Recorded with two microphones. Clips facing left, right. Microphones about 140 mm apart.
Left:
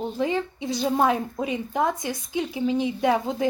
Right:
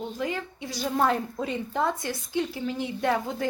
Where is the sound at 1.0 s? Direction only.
10° left (ahead or behind).